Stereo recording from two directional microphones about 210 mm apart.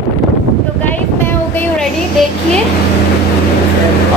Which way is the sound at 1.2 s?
10° left (ahead or behind).